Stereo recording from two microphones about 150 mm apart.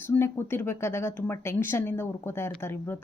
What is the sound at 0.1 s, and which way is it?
Speech, 15° left (ahead or behind).